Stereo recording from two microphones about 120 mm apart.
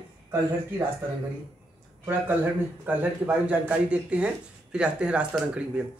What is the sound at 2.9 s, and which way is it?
Speech, 10° right (ahead or behind).